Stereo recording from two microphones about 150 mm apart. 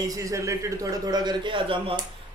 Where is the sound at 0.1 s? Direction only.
20° right (ahead or behind).